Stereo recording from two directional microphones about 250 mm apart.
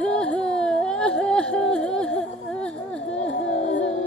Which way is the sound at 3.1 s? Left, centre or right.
Left.